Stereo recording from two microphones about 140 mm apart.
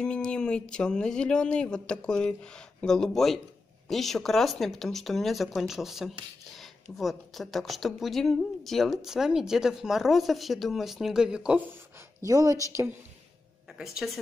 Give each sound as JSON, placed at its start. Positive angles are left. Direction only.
{"t": 0.0, "sound": "speech", "side_deg": 5}
{"t": 12.3, "sound": "speech", "side_deg": -25}
{"t": 13.7, "sound": "speech", "side_deg": 0}